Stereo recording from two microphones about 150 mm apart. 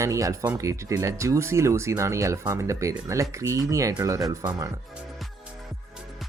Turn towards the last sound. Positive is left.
turn(degrees=-20)  # may be behind; listen again after turning